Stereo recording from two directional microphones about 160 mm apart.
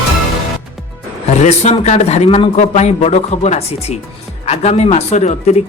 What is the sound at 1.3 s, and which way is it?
Speech, 45° left (ahead or behind).